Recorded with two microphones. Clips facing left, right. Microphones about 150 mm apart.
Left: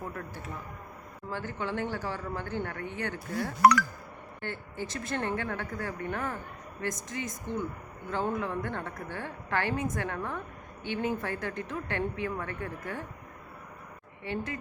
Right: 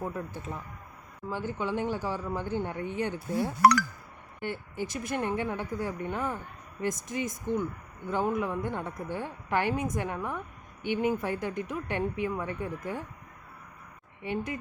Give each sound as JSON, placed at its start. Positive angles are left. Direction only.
{"t": 0.2, "sound": "a woman's voice", "side_deg": -20}
{"t": 14.3, "sound": "a woman's voice", "side_deg": -15}